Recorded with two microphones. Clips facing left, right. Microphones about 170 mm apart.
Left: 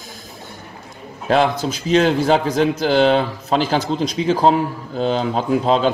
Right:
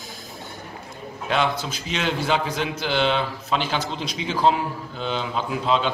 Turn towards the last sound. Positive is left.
turn(degrees=40)  # may be behind; listen again after turning